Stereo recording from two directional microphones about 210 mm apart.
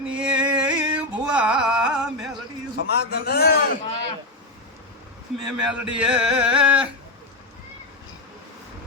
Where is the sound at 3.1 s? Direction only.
50° left (ahead or behind).